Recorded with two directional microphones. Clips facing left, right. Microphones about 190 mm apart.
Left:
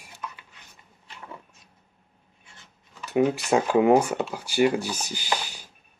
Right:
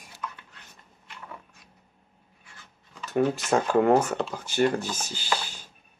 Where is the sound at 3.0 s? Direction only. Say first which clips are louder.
Left 2 dB; 10° left (ahead or behind).